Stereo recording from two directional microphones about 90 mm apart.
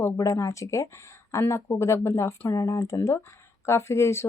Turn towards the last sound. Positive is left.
turn(degrees=30)  # may be behind; listen again after turning